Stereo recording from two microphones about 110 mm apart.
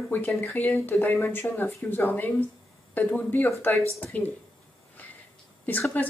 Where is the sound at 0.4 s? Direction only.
20° left (ahead or behind).